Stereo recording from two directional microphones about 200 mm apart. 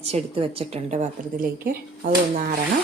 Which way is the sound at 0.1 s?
30° right (ahead or behind).